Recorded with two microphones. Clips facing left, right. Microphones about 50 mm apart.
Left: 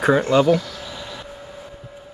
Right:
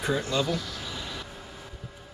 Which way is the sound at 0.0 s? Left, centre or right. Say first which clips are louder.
Left 11 dB; left.